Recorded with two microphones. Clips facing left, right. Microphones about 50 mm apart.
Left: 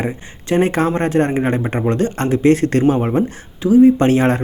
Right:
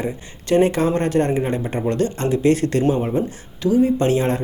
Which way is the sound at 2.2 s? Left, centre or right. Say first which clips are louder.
Left 5 dB; left.